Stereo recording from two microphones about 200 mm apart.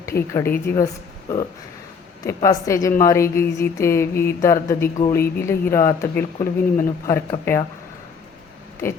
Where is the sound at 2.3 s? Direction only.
15° left (ahead or behind).